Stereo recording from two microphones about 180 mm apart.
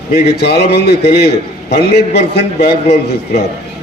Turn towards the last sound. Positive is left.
turn(degrees=65)  # may be behind; listen again after turning